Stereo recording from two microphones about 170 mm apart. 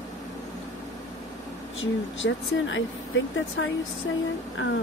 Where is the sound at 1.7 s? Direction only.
90° left.